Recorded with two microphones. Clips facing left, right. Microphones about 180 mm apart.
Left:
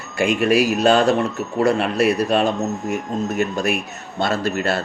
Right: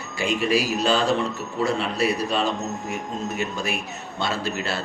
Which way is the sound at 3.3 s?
55° left (ahead or behind).